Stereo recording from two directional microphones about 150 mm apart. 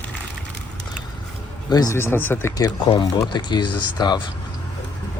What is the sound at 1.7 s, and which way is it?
Speech, 25° left (ahead or behind).